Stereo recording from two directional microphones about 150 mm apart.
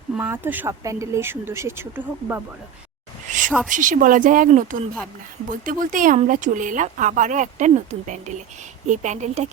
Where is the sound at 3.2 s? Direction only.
55° right (ahead or behind).